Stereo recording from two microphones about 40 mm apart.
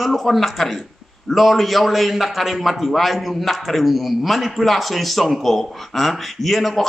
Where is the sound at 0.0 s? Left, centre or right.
Centre.